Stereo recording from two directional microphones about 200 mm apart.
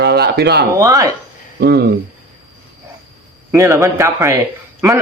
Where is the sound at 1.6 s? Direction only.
50° right (ahead or behind).